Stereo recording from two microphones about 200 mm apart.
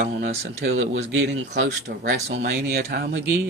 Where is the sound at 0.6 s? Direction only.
60° right (ahead or behind).